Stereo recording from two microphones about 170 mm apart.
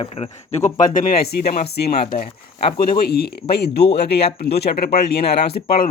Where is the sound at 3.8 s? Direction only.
35° left (ahead or behind).